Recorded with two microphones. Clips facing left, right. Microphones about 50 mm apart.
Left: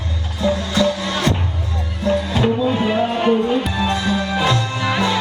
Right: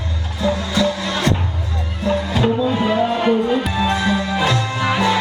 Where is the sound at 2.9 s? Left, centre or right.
Left.